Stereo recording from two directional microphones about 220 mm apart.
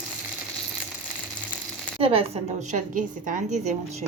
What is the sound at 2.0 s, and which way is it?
A woman's voice, 25° right (ahead or behind).